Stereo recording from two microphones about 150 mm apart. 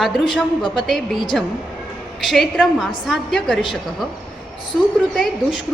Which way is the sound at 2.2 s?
Centre (ahead or behind).